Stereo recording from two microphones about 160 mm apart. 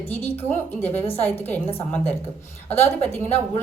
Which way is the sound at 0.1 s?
10° left (ahead or behind).